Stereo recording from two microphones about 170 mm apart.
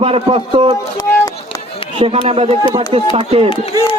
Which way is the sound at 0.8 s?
20° left (ahead or behind).